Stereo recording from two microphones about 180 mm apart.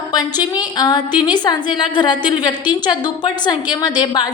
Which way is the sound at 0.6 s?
25° left (ahead or behind).